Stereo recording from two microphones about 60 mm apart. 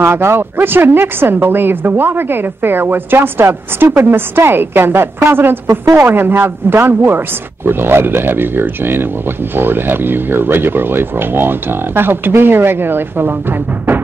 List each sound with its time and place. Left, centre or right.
0.0 s speech: right